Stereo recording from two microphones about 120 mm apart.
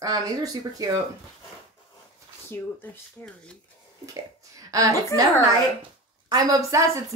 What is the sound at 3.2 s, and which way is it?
Speech, 10° left (ahead or behind).